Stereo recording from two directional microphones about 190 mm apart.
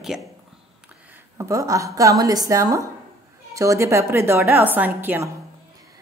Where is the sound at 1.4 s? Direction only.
15° right (ahead or behind).